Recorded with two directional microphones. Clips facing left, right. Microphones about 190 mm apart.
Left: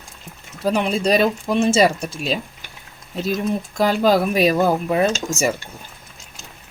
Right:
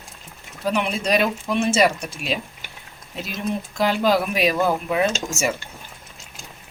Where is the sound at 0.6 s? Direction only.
35° left (ahead or behind).